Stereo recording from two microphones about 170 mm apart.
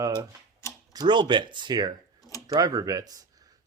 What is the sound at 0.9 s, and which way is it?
Speech, 25° right (ahead or behind).